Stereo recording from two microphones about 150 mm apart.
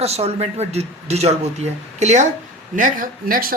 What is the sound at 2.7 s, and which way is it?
Speech, 65° right (ahead or behind).